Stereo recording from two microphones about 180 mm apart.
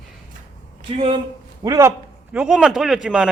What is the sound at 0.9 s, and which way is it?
Speech, 30° right (ahead or behind).